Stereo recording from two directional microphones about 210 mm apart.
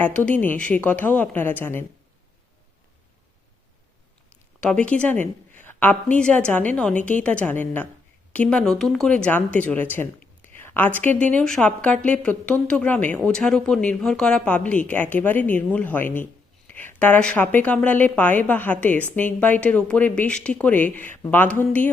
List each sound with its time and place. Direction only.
0.0 s speech: 5° left (ahead or behind)
4.6 s speech: 5° left (ahead or behind)
5.2 s a sound: 35° right (ahead or behind)
5.6 s speech: 10° left (ahead or behind)
10.5 s a sound: 10° left (ahead or behind)
11.2 s speech: 5° left (ahead or behind)